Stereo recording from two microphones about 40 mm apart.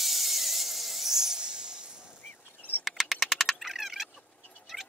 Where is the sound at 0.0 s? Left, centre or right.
Centre; by 2.0 s right.